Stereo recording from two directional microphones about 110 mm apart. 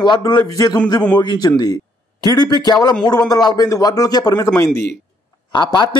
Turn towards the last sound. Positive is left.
turn(degrees=40)  # may be behind; listen again after turning